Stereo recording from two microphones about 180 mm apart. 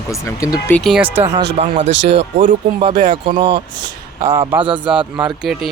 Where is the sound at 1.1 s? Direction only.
35° right (ahead or behind).